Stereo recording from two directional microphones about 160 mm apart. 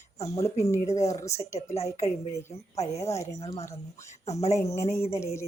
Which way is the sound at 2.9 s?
20° left (ahead or behind).